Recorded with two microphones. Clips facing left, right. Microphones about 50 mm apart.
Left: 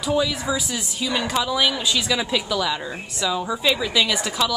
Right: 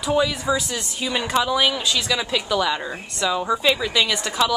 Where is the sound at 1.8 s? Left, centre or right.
Centre.